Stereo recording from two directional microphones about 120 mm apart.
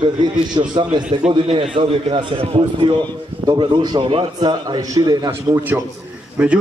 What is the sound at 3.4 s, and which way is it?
A man's voice, 35° right (ahead or behind).